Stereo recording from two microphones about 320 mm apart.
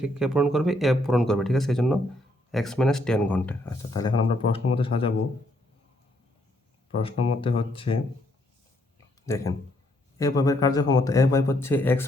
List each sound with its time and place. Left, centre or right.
0.0 s a man's voice: centre
7.0 s a man's voice: centre
9.2 s a man's voice: centre